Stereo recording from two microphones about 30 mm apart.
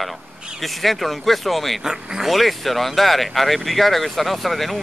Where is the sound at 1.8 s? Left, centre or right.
Centre.